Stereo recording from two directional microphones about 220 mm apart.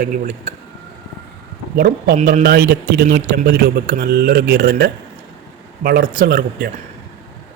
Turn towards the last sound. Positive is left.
turn(degrees=-45)  # may be behind; listen again after turning